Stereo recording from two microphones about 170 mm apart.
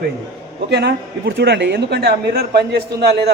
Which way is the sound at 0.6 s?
80° right.